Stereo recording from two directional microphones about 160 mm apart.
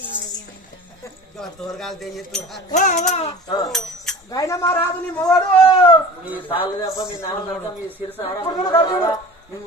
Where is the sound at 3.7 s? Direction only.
Centre (ahead or behind).